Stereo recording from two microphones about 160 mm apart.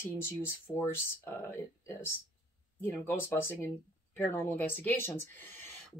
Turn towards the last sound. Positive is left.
turn(degrees=15)  # may be behind; listen again after turning